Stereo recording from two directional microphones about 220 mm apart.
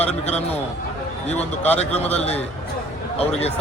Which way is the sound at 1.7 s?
30° left (ahead or behind).